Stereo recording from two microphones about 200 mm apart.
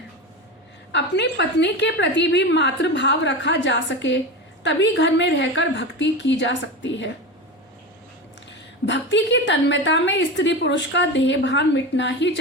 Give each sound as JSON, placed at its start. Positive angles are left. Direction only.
{"t": 0.9, "sound": "a woman's voice", "side_deg": 60}
{"t": 8.9, "sound": "a woman's voice", "side_deg": 65}